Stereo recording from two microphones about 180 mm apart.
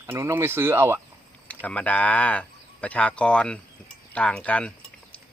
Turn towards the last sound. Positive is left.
turn(degrees=5)  # may be behind; listen again after turning